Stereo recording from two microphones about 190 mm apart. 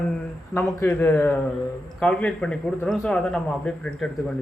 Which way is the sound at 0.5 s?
15° left (ahead or behind).